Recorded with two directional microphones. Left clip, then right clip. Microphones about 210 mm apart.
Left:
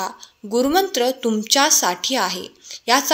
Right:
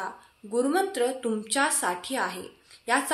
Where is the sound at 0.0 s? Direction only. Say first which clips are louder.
Left 8 dB; 40° left (ahead or behind).